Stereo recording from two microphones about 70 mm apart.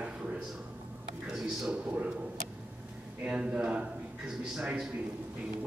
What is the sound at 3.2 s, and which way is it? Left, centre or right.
Speech, centre.